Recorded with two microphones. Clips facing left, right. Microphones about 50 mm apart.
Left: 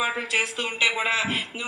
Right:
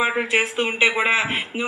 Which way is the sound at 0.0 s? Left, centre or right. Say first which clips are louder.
Right 5 dB; right.